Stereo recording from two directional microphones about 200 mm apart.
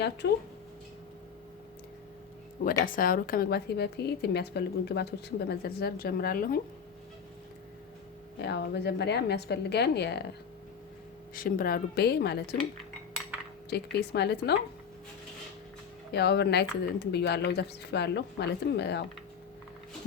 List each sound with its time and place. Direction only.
0.2 s a woman's voice: 55° left (ahead or behind)
2.8 s speech: 45° left (ahead or behind)
8.4 s a woman's voice: 55° left (ahead or behind)
11.3 s speech: 45° left (ahead or behind)
13.7 s a woman's voice: 55° left (ahead or behind)
16.1 s a woman's voice: 55° left (ahead or behind)